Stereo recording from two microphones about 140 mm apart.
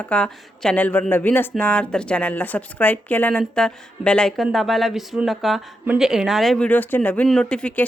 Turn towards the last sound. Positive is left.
turn(degrees=10)  # may be behind; listen again after turning